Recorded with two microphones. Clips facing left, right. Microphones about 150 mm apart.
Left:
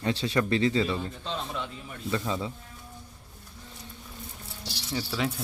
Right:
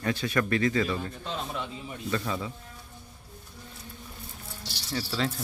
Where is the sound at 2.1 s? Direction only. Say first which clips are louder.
Left 1 dB; 20° left (ahead or behind).